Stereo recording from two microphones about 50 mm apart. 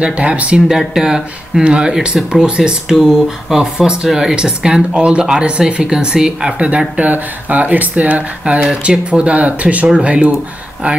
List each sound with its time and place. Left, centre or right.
0.0 s speech: right
0.7 s speech: centre
7.0 s speech: right